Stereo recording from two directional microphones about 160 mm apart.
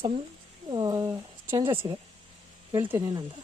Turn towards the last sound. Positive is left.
turn(degrees=-15)  # may be behind; listen again after turning